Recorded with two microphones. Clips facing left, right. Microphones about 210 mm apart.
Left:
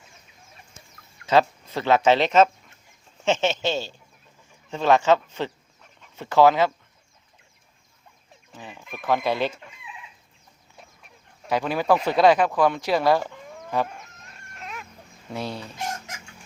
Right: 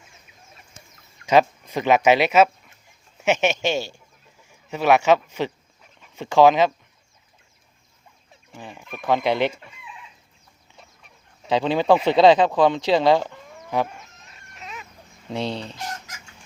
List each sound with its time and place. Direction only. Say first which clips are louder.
1.3 s speech: right 2 dB; 15° right (ahead or behind)
8.5 s chicken: right 2 dB; 15° right (ahead or behind)
8.9 s speech: right 2 dB; 15° right (ahead or behind)
11.4 s speech: right 3 dB; 20° right (ahead or behind)
13.8 s chicken: even; centre (ahead or behind)
15.3 s speech: right 4 dB; 25° right (ahead or behind)